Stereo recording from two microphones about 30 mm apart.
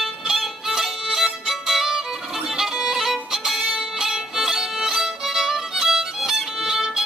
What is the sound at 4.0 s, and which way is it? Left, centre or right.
Violin, centre.